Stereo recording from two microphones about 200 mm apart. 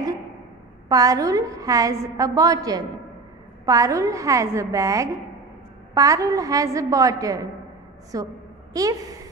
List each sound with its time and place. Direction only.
0.8 s a woman's voice: 15° right (ahead or behind)